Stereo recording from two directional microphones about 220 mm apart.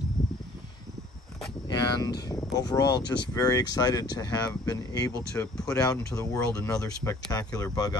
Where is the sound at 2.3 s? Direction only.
15° left (ahead or behind).